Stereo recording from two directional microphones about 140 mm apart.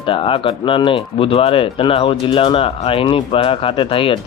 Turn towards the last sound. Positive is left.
turn(degrees=40)  # may be behind; listen again after turning